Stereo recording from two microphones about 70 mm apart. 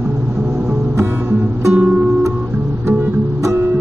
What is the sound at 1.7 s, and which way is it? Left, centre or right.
Music, right.